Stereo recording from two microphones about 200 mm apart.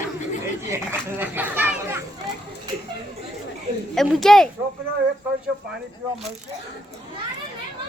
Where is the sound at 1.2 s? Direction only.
10° right (ahead or behind).